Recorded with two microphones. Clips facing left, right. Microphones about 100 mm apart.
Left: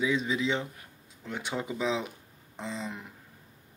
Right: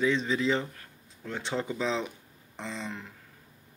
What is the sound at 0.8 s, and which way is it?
Speech, 15° left (ahead or behind).